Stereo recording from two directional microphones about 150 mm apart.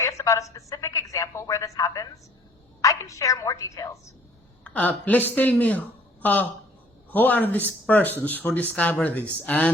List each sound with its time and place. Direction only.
0.0 s a woman's voice: 20° left (ahead or behind)
4.6 s speech: 10° left (ahead or behind)